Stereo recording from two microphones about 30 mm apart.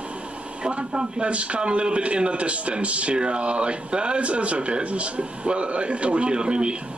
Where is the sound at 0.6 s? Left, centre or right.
Right.